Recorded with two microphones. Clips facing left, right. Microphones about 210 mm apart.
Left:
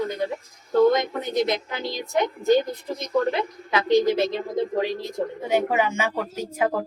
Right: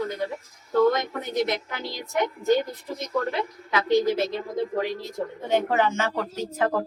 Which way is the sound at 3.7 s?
25° left (ahead or behind).